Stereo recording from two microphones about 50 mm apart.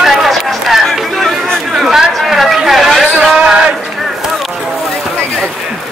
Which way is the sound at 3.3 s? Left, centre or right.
Centre.